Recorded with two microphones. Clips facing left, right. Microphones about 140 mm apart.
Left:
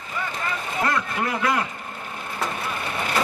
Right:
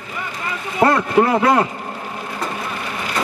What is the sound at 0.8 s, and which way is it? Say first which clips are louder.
Speech: right 11 dB; 55° right (ahead or behind).